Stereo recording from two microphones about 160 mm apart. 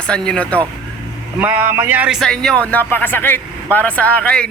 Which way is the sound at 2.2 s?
5° left (ahead or behind).